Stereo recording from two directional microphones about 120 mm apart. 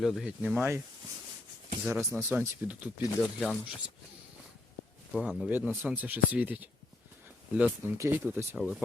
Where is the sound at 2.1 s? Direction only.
15° right (ahead or behind).